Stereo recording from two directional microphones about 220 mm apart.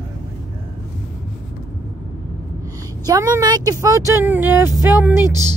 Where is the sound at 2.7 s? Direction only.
15° right (ahead or behind).